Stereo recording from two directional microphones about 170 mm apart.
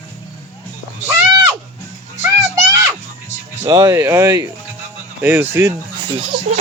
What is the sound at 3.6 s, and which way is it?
Speech, 20° right (ahead or behind).